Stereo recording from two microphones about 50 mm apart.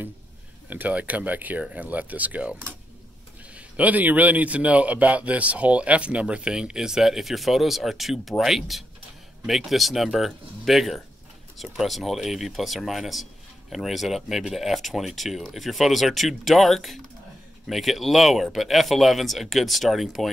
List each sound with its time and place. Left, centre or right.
0.7 s speech: right
3.5 s a man's voice: right; by 20.2 s centre